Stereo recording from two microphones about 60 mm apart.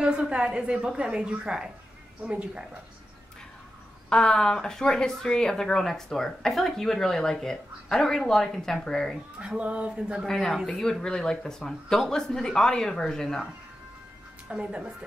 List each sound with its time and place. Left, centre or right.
0.0 s a woman's voice: centre
4.1 s speech: centre
9.6 s speech: right
10.2 s speech: centre
14.5 s a woman's voice: centre